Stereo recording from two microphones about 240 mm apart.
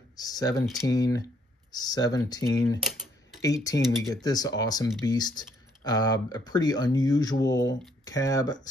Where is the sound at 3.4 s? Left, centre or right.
Centre.